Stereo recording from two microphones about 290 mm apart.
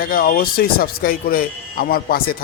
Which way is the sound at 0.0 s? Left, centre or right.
Left.